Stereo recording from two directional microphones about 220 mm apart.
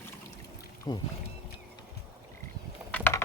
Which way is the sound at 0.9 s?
15° left (ahead or behind).